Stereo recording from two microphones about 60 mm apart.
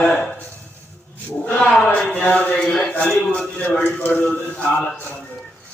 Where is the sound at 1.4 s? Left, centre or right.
Centre.